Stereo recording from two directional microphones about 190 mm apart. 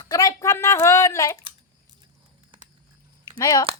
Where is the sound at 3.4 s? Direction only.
20° left (ahead or behind).